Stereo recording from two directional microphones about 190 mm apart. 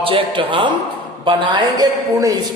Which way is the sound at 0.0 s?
30° right (ahead or behind).